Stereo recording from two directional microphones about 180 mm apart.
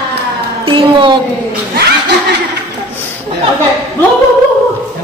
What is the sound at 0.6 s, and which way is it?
Speech, 25° right (ahead or behind).